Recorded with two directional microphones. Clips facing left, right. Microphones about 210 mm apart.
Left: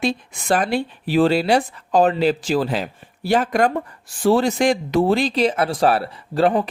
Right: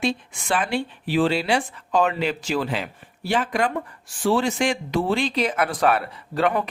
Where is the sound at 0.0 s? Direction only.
40° left (ahead or behind).